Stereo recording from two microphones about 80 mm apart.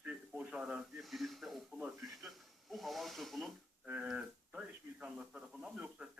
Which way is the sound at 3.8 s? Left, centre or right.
Centre.